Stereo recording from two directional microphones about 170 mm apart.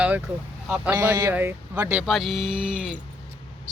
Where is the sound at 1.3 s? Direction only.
10° right (ahead or behind).